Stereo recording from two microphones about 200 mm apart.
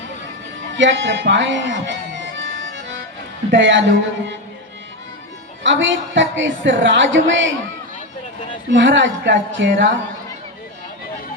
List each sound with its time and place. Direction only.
0.8 s a woman's voice: 65° right (ahead or behind)
2.2 s accordion: 65° right (ahead or behind)
3.5 s a woman's voice: 65° right (ahead or behind)
5.6 s a woman's voice: 65° right (ahead or behind)
8.7 s speech: 65° right (ahead or behind)